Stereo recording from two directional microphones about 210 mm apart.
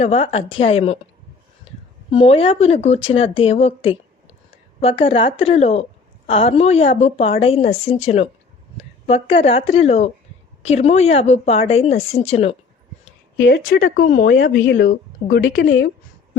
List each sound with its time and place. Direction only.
0.0 s a woman's voice: 30° left (ahead or behind)
4.8 s a woman's voice: 25° left (ahead or behind)
8.8 s a sound: 30° left (ahead or behind)
9.4 s a woman's voice: 30° left (ahead or behind)
13.3 s speech: 65° left (ahead or behind)
13.7 s speech: 45° left (ahead or behind)